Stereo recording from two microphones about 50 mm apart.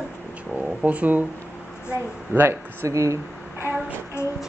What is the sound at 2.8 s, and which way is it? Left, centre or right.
Speech, right.